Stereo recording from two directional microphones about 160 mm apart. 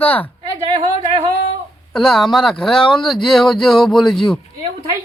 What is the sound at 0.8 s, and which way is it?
Speech, 40° right (ahead or behind).